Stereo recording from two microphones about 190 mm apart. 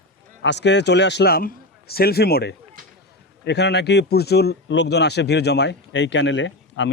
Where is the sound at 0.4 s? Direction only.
65° left (ahead or behind).